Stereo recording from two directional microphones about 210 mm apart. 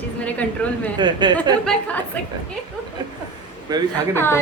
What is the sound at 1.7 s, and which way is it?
Speech, 5° left (ahead or behind).